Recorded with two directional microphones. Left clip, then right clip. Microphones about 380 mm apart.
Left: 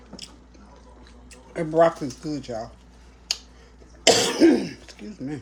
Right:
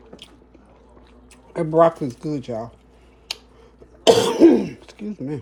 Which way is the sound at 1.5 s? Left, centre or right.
Right.